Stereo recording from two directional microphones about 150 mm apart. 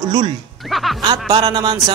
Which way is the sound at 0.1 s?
30° right (ahead or behind).